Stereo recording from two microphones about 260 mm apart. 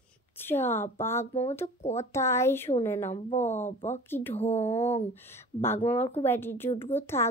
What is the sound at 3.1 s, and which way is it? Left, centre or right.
Speech, left.